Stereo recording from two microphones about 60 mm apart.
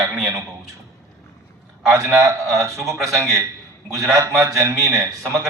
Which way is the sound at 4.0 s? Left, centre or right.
Right.